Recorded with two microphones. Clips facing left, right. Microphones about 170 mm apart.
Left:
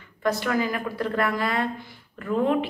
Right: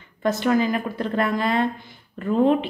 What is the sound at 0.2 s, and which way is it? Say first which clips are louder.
A woman's voice: right 4 dB; 25° right (ahead or behind).